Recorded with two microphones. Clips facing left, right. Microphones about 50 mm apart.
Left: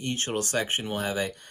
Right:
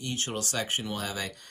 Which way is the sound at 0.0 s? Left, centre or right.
Left.